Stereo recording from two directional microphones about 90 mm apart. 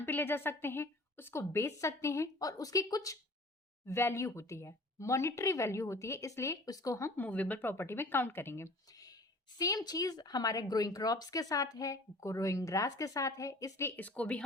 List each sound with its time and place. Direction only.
0.0 s speech: 25° left (ahead or behind)
7.2 s speech: 15° left (ahead or behind)
9.6 s speech: 45° left (ahead or behind)
13.8 s speech: 20° left (ahead or behind)